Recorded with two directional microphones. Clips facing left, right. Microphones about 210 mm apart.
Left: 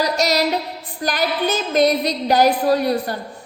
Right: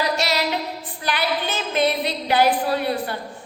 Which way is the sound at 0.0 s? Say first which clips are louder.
Left 4 dB; 40° left (ahead or behind).